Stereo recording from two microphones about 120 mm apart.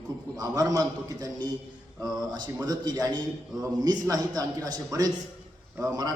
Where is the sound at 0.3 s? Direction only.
30° right (ahead or behind).